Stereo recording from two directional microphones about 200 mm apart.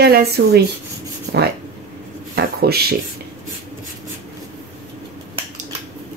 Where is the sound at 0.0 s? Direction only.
50° right (ahead or behind).